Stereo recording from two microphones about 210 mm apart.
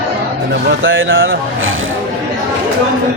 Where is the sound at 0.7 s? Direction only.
65° right (ahead or behind).